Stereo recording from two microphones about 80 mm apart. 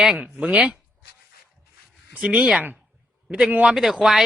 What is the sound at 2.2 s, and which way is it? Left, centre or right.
A man's voice, centre.